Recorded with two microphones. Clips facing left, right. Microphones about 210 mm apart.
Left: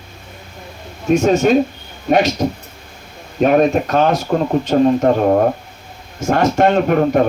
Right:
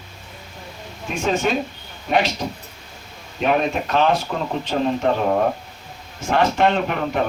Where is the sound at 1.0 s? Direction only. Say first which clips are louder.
Left 9 dB; 45° left (ahead or behind).